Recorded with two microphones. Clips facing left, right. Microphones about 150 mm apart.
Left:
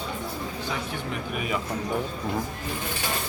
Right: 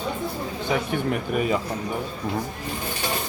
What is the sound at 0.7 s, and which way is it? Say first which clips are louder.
Speech: right 11 dB; 55° right (ahead or behind).